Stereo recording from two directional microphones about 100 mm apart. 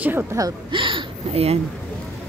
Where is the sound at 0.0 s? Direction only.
20° right (ahead or behind).